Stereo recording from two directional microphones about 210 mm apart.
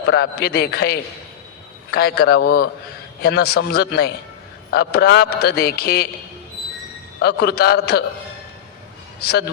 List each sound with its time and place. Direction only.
0.1 s a man's voice: 50° left (ahead or behind)
7.2 s a man's voice: 50° left (ahead or behind)